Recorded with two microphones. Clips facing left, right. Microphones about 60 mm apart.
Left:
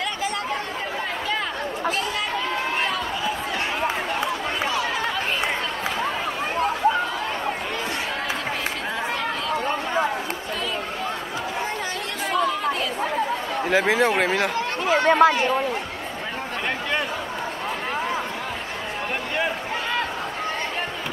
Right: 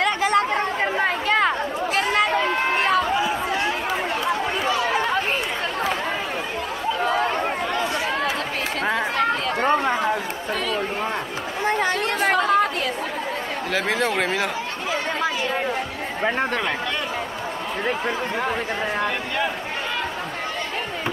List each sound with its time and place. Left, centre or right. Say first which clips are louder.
0.0 s chatter: right 7 dB; right
2.0 s run: right 6 dB; right
9.6 s chatter: right 6 dB; right
11.6 s chatter: right 6 dB; right
13.8 s speech: left 2 dB; centre
14.9 s a sound: left 9 dB; left